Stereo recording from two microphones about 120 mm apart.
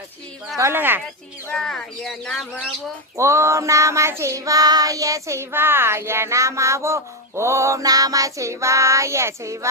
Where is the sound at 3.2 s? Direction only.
25° right (ahead or behind).